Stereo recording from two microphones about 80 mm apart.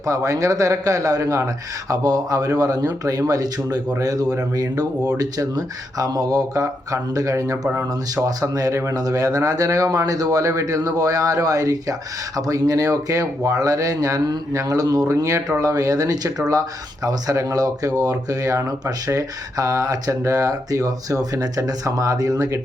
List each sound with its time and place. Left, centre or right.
0.0 s speech: right